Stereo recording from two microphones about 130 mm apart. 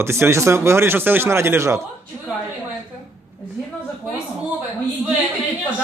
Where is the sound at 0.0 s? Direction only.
20° right (ahead or behind).